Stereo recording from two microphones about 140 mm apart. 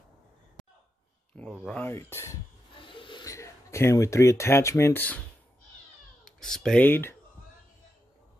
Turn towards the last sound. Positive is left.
turn(degrees=15)  # may be behind; listen again after turning